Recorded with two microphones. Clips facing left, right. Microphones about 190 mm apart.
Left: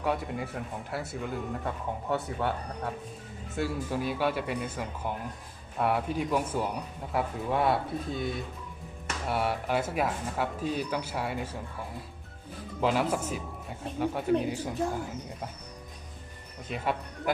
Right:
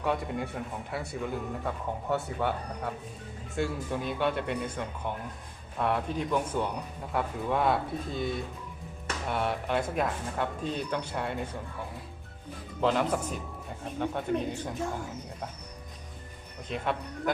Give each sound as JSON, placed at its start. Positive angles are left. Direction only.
{"t": 0.0, "sound": "speech", "side_deg": 0}
{"t": 3.5, "sound": "speech", "side_deg": 5}
{"t": 12.8, "sound": "speech", "side_deg": 5}
{"t": 16.6, "sound": "speech", "side_deg": 5}